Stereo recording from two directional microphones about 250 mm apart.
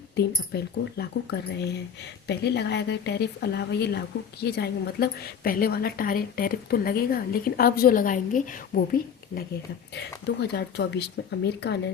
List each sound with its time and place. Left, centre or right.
0.5 s speech: left
9.9 s speech: left